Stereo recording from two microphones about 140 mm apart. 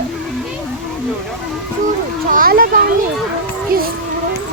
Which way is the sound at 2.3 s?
90° right.